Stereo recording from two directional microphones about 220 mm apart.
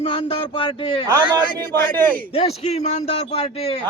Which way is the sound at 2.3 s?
25° left (ahead or behind).